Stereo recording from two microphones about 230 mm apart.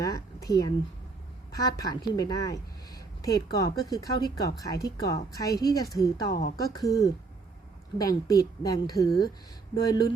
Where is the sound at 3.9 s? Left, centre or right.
Centre.